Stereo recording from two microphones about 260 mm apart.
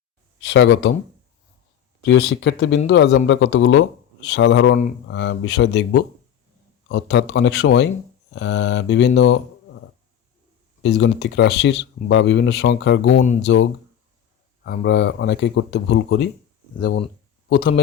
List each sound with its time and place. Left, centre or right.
0.4 s speech: left
2.0 s speech: left
10.8 s speech: left
17.5 s speech: left